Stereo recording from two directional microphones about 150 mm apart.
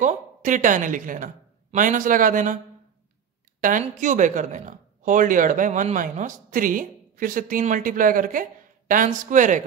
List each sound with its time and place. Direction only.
0.0 s a woman's voice: 55° right (ahead or behind)
3.6 s speech: 60° right (ahead or behind)